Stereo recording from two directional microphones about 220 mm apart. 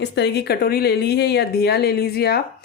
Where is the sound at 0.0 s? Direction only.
50° left (ahead or behind).